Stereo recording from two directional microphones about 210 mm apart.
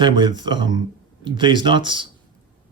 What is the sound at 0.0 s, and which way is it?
Speech, 20° right (ahead or behind).